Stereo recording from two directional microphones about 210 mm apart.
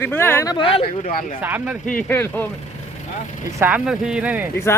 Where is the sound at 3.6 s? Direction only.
5° right (ahead or behind).